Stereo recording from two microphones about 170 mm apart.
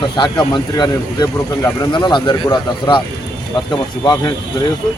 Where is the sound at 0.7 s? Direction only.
25° left (ahead or behind).